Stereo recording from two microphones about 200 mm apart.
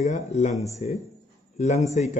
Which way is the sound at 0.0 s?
35° left (ahead or behind).